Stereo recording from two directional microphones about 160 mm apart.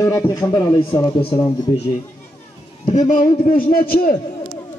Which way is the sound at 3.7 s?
65° left (ahead or behind).